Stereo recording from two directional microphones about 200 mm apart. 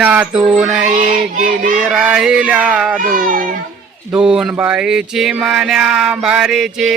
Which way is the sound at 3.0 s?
45° right (ahead or behind).